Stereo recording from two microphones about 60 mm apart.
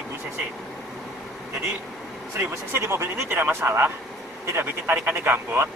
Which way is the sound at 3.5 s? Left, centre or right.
Right.